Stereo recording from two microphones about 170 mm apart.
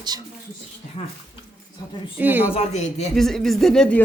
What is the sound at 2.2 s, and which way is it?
Speech, 10° right (ahead or behind).